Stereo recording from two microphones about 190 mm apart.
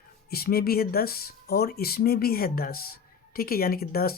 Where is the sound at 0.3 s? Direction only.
55° left (ahead or behind).